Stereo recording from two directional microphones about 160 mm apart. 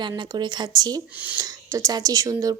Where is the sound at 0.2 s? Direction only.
25° right (ahead or behind).